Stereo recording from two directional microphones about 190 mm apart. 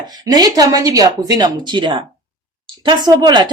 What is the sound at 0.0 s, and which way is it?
A woman's voice, 20° right (ahead or behind).